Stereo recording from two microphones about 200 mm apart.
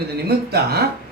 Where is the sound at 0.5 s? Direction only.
55° right (ahead or behind).